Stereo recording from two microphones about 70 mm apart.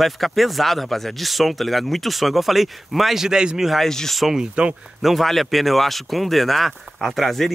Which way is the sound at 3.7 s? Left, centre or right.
Centre.